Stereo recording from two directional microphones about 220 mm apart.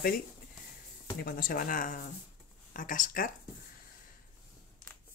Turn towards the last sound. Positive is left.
turn(degrees=40)  # may be behind; listen again after turning